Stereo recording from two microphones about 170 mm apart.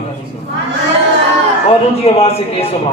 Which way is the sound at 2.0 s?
35° left (ahead or behind).